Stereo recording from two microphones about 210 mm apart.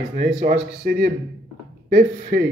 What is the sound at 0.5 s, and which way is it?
Speech, 45° right (ahead or behind).